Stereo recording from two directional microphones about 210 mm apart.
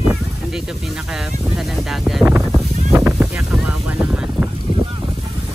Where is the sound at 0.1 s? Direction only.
Centre (ahead or behind).